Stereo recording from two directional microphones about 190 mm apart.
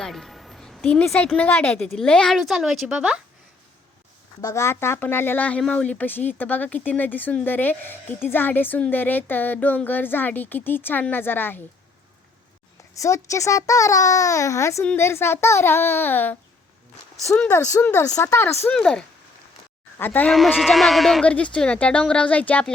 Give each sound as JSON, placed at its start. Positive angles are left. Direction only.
{"t": 0.0, "sound": "a woman's voice", "side_deg": 0}
{"t": 4.4, "sound": "speech", "side_deg": 15}
{"t": 12.9, "sound": "a woman's voice", "side_deg": 15}